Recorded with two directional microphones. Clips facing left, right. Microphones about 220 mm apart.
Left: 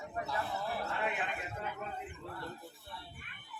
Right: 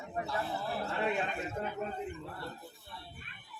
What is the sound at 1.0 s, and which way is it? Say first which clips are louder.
Speech: right 4 dB; 35° right (ahead or behind).